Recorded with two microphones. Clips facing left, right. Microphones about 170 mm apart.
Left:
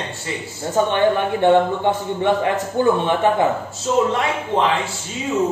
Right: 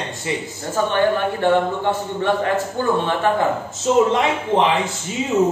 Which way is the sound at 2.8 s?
15° left (ahead or behind).